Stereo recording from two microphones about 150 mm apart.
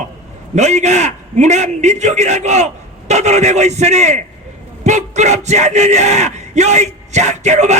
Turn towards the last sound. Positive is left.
turn(degrees=-50)  # may be behind; listen again after turning